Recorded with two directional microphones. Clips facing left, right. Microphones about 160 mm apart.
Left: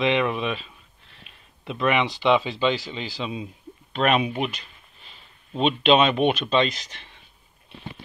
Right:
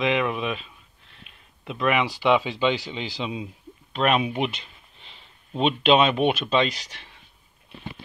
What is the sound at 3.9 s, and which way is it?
Speech, centre (ahead or behind).